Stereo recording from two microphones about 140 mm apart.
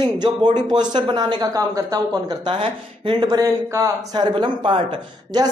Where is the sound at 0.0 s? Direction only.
30° right (ahead or behind).